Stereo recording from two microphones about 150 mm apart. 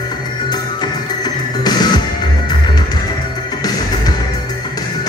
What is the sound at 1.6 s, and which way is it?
Music, 30° left (ahead or behind).